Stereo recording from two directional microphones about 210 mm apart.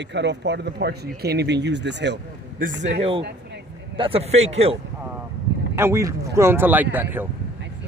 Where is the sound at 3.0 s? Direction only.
25° right (ahead or behind).